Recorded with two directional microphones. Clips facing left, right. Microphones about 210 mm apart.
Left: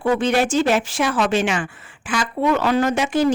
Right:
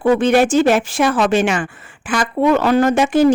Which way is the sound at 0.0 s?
55° right (ahead or behind).